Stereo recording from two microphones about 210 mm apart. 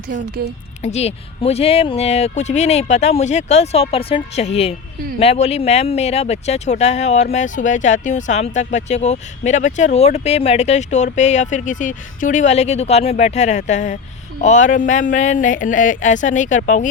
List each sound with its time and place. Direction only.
0.8 s speech: 30° left (ahead or behind)